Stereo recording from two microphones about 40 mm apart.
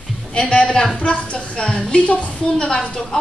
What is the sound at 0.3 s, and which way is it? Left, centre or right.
A woman's voice, left.